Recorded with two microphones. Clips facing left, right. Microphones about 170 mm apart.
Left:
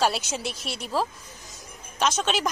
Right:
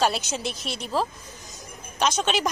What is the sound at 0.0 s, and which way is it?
A woman's voice, 5° left (ahead or behind).